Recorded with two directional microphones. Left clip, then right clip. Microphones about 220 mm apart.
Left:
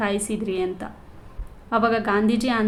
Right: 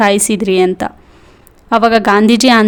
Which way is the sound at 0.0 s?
50° right (ahead or behind).